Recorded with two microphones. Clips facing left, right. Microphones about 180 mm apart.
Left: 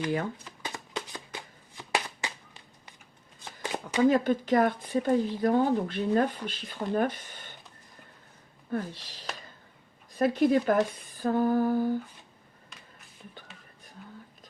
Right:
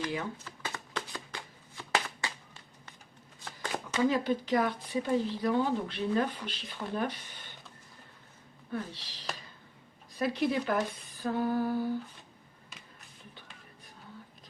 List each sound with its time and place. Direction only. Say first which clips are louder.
0.4 s shuffling cards: left 1 dB; 15° left (ahead or behind)
3.4 s a sound: left 2 dB; 15° left (ahead or behind)
4.1 s speech: left 4 dB; 50° left (ahead or behind)
8.7 s speech: left 5 dB; 50° left (ahead or behind)